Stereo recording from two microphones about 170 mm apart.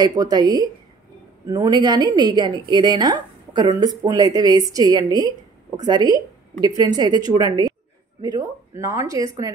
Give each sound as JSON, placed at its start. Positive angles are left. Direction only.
{"t": 0.0, "sound": "a woman's voice", "side_deg": -25}